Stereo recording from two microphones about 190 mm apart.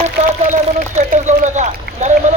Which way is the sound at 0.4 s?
45° right (ahead or behind).